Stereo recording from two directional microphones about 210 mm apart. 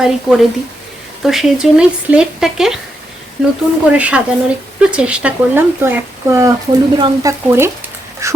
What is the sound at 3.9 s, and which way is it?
Speech, 5° right (ahead or behind).